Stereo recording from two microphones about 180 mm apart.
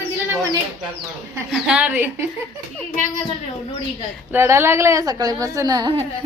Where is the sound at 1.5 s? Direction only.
5° right (ahead or behind).